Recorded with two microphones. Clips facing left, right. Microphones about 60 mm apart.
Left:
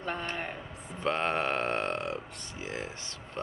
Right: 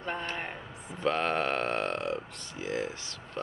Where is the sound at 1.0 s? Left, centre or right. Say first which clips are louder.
Right 1 dB; left.